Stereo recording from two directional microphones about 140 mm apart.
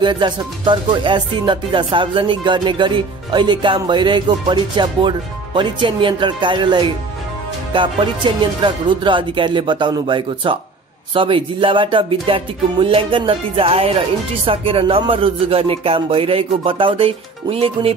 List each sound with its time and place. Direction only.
0.0 s speech: 35° right (ahead or behind)